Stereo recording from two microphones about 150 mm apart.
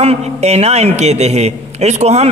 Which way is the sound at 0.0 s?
45° right (ahead or behind).